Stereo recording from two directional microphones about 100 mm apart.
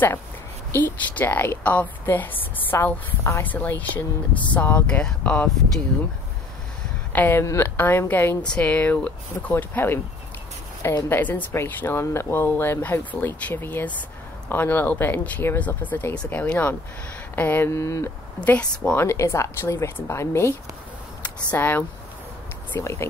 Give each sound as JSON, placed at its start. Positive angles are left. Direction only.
{"t": 0.7, "sound": "a woman's voice", "side_deg": 20}
{"t": 7.1, "sound": "a woman's voice", "side_deg": 20}
{"t": 11.1, "sound": "a woman's voice", "side_deg": 15}
{"t": 18.4, "sound": "speech", "side_deg": 15}
{"t": 18.9, "sound": "a woman's voice", "side_deg": 30}
{"t": 21.2, "sound": "speech", "side_deg": 15}